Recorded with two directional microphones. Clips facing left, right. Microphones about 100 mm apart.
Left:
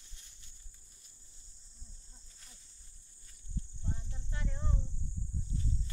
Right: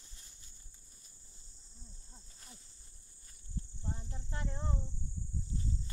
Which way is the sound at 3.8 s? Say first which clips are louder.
Right 2 dB; 35° right (ahead or behind).